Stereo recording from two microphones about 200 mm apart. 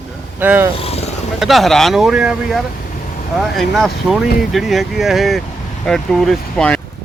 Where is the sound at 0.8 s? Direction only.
30° left (ahead or behind).